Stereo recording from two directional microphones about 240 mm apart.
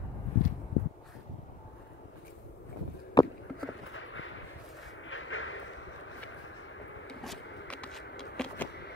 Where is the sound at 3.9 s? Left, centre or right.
Left.